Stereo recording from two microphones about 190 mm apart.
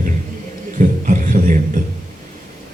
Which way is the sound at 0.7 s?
40° right (ahead or behind).